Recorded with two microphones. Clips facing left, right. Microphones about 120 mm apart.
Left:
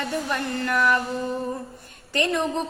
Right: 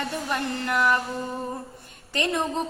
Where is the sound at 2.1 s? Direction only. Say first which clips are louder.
Left 2 dB; 20° right (ahead or behind).